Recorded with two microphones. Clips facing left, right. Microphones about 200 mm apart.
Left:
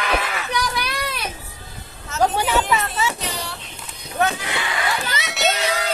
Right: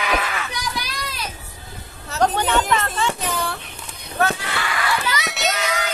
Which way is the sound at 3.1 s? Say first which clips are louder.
Right 4 dB; 50° right (ahead or behind).